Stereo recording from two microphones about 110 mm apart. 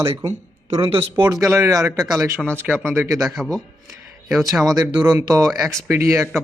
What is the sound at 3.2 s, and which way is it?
Speech, 5° right (ahead or behind).